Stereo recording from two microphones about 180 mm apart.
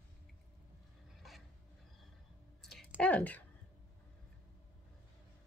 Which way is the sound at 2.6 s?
Centre (ahead or behind).